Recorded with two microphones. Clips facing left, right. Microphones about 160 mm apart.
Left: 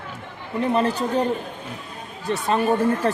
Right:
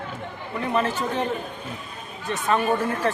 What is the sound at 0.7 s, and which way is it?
Speech, 35° left (ahead or behind).